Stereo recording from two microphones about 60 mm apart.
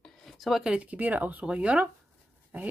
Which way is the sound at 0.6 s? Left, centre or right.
Centre.